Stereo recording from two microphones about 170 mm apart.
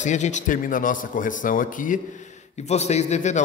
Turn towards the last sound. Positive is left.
turn(degrees=45)  # may be behind; listen again after turning